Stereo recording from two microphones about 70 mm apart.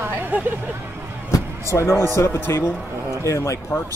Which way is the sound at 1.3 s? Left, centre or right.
Left.